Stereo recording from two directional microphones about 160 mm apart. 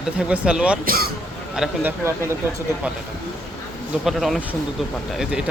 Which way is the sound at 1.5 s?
5° right (ahead or behind).